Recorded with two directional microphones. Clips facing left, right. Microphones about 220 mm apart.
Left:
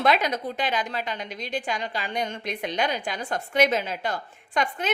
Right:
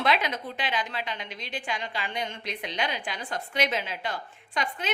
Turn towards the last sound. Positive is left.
turn(degrees=45)  # may be behind; listen again after turning